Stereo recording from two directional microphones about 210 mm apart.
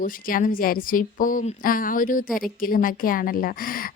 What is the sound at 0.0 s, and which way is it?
Speech, 40° left (ahead or behind).